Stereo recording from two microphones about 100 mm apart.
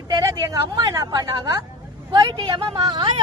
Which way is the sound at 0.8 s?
40° right (ahead or behind).